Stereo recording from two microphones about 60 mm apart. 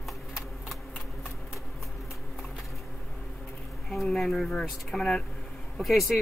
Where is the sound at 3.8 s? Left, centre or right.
Centre.